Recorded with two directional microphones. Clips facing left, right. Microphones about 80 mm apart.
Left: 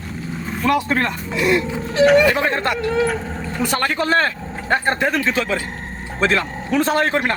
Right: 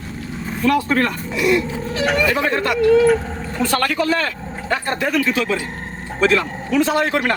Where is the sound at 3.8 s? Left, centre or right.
Left.